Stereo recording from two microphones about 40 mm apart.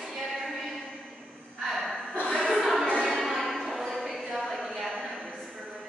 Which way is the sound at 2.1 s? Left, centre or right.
Left.